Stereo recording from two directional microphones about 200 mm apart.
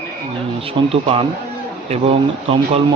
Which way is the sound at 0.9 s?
30° right (ahead or behind).